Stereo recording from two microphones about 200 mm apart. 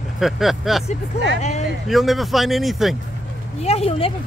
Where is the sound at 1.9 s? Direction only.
Centre (ahead or behind).